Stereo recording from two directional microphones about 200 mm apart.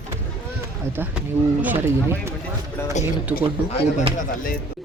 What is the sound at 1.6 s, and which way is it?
Speech, 10° right (ahead or behind).